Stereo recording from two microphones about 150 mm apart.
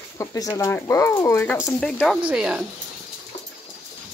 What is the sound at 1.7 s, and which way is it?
Speech, 5° left (ahead or behind).